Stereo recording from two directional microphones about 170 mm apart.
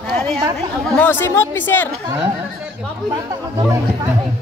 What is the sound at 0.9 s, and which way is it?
Speech, 10° left (ahead or behind).